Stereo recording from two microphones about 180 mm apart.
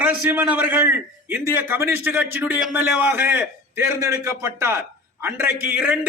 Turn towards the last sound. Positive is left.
turn(degrees=-10)  # may be behind; listen again after turning